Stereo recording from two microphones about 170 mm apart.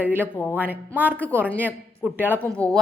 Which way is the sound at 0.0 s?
10° right (ahead or behind).